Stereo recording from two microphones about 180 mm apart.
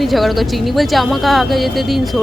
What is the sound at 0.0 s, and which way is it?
A woman's voice, centre (ahead or behind).